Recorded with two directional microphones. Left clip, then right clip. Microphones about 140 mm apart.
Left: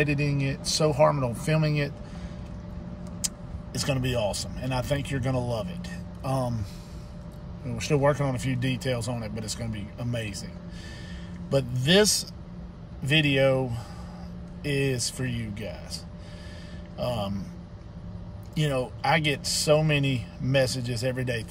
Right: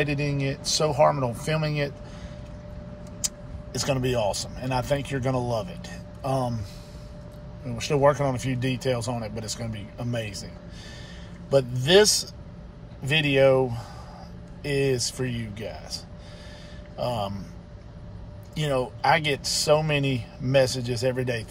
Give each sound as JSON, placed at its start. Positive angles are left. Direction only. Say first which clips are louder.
{"t": 0.0, "sound": "speech", "louder": "even", "side_deg": 15}
{"t": 3.7, "sound": "speech", "louder": "right 3 dB", "side_deg": 10}
{"t": 7.6, "sound": "speech", "louder": "right 3 dB", "side_deg": 20}
{"t": 11.5, "sound": "a man's voice", "louder": "right 4 dB", "side_deg": 15}
{"t": 18.5, "sound": "speech", "louder": "right 2 dB", "side_deg": 15}